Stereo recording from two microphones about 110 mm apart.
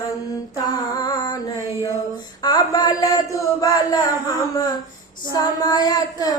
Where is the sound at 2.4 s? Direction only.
40° left (ahead or behind).